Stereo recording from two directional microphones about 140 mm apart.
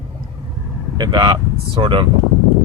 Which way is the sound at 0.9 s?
30° right (ahead or behind).